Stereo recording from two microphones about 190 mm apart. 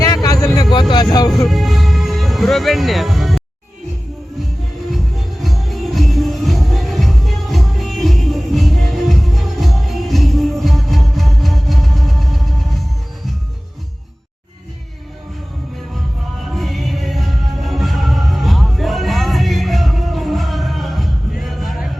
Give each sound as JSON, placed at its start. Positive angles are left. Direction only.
{"t": 0.0, "sound": "a sound", "side_deg": 20}
{"t": 1.3, "sound": "music", "side_deg": 0}
{"t": 4.9, "sound": "music", "side_deg": 0}
{"t": 16.5, "sound": "music", "side_deg": 0}